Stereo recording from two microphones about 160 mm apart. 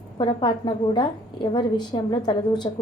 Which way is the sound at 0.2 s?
30° left (ahead or behind).